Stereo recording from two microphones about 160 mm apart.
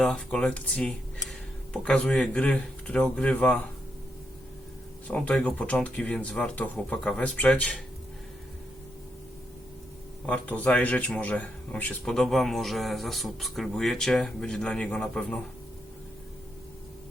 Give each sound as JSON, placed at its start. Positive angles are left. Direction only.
{"t": 0.0, "sound": "speech", "side_deg": 5}
{"t": 5.0, "sound": "speech", "side_deg": 10}
{"t": 10.2, "sound": "speech", "side_deg": 10}